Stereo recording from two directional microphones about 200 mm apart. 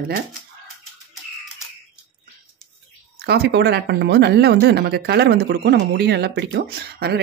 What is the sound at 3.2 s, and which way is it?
A woman's voice, 55° right (ahead or behind).